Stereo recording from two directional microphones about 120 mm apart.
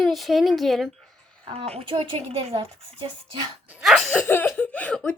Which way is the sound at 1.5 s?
55° right (ahead or behind).